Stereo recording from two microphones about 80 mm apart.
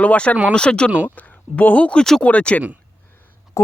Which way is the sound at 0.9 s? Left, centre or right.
Centre.